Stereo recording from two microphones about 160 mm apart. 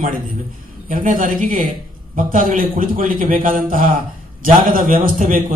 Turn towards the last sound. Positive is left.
turn(degrees=-60)  # may be behind; listen again after turning